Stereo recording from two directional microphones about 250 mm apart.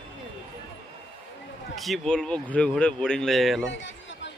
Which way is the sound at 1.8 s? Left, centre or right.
Centre.